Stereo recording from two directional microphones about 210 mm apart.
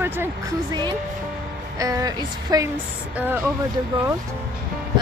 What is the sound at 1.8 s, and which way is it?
Speech, 15° right (ahead or behind).